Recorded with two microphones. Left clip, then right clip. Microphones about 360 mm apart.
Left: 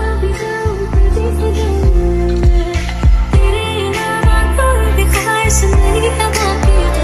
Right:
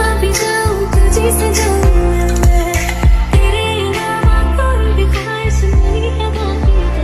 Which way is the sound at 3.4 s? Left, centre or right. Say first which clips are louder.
Right 1 dB; centre.